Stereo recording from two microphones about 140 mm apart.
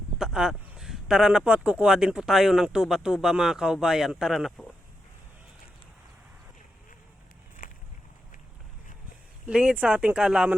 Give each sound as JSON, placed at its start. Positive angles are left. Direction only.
{"t": 0.2, "sound": "speech", "side_deg": -5}
{"t": 7.6, "sound": "a sound", "side_deg": 80}
{"t": 9.5, "sound": "speech", "side_deg": -5}